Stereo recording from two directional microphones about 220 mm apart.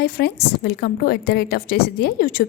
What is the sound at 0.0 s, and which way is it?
A woman's voice, 45° left (ahead or behind).